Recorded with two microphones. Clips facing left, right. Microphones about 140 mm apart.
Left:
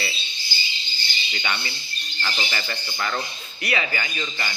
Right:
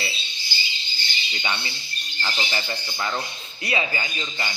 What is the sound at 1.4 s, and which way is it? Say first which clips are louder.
Speech: even; 20° right (ahead or behind).